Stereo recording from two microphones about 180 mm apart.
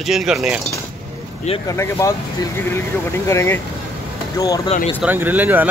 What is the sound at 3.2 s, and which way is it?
Speech, 15° left (ahead or behind).